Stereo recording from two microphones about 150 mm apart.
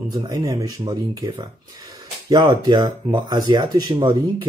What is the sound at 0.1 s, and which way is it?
Speech, 25° right (ahead or behind).